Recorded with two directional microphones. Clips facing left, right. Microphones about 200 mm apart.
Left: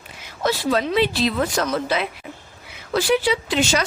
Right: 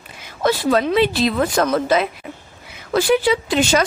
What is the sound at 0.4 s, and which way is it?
Speech, 50° right (ahead or behind).